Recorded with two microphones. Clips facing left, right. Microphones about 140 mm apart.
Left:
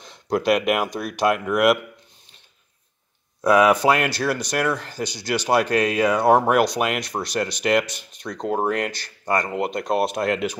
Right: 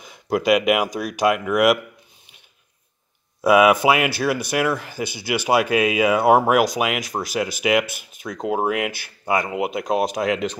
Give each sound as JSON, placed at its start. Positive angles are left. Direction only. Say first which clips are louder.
{"t": 0.0, "sound": "speech", "louder": "right 1 dB", "side_deg": -5}
{"t": 3.4, "sound": "speech", "louder": "right 1 dB", "side_deg": -10}